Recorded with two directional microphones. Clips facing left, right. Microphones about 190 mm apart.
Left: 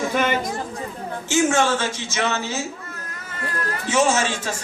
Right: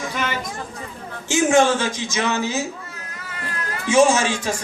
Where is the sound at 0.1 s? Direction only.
50° left (ahead or behind).